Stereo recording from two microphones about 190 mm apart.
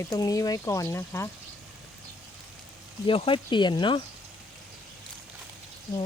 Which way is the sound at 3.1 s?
30° left (ahead or behind).